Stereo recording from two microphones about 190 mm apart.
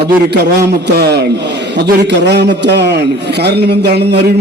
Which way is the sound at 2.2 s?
65° right (ahead or behind).